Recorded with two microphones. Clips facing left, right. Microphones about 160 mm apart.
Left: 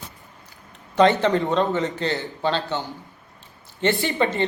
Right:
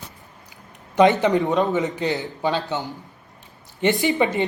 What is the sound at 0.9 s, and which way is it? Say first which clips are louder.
Speech: right 1 dB; 15° right (ahead or behind).